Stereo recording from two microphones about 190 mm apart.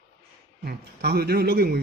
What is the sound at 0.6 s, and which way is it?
A man's voice, 55° right (ahead or behind).